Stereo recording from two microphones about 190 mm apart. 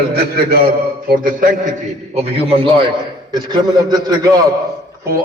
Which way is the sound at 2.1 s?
35° right (ahead or behind).